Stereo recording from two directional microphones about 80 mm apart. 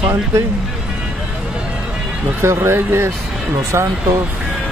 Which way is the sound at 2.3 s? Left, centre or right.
Right.